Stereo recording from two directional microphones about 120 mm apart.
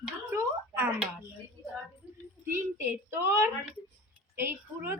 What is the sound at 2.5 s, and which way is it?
A child's voice, 20° right (ahead or behind).